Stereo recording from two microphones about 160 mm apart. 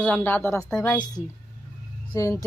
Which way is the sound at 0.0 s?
10° left (ahead or behind).